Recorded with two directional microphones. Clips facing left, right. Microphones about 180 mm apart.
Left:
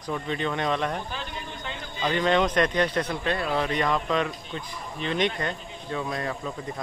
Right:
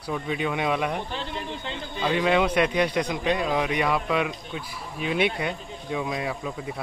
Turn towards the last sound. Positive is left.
turn(degrees=-10)  # may be behind; listen again after turning